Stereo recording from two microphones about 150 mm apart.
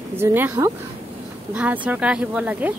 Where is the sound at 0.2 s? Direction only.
15° right (ahead or behind).